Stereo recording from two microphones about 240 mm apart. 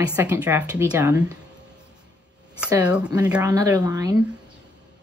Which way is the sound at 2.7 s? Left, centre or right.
Centre.